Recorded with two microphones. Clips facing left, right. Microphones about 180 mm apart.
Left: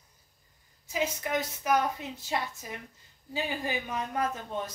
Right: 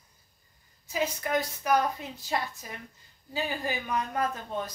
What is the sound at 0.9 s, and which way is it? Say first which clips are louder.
A woman's voice: right 1 dB; 20° left (ahead or behind).